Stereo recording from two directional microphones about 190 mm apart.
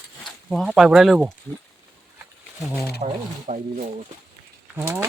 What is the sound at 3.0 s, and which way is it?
Speech, 40° right (ahead or behind).